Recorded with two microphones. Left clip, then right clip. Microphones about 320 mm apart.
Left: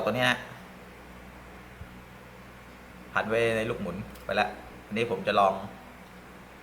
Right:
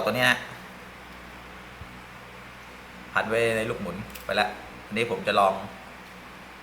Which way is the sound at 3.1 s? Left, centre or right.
Centre.